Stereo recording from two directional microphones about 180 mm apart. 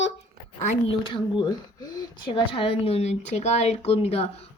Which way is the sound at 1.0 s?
25° left (ahead or behind).